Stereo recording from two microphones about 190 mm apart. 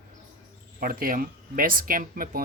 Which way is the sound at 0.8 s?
50° right (ahead or behind).